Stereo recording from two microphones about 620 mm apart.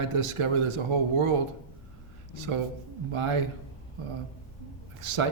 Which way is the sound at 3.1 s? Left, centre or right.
Right.